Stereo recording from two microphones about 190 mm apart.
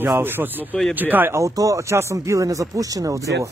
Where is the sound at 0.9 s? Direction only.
10° right (ahead or behind).